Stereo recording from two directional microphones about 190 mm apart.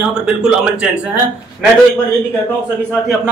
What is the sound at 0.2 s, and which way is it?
Speech, 5° right (ahead or behind).